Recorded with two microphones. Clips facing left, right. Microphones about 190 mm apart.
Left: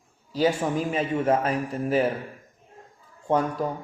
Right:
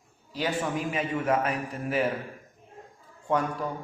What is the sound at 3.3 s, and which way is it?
Speech, 35° left (ahead or behind).